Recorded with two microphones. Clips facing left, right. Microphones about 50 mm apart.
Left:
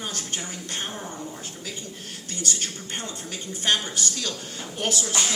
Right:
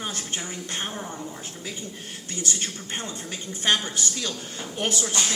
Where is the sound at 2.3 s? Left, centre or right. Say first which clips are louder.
Even; right.